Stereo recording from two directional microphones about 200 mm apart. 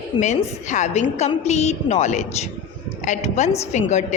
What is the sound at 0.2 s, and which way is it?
A woman's voice, 35° left (ahead or behind).